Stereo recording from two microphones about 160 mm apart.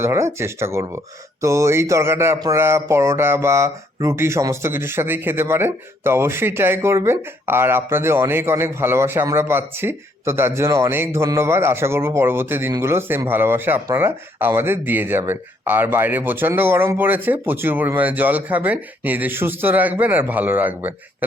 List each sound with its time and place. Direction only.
0.0 s speech: 15° right (ahead or behind)